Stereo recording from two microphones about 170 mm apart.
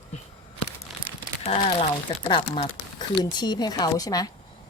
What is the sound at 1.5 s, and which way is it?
A woman's voice, 40° left (ahead or behind).